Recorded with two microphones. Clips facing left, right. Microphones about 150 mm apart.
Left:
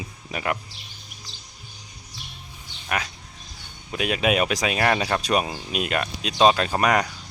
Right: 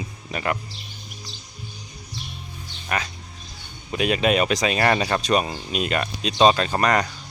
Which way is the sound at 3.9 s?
5° left (ahead or behind).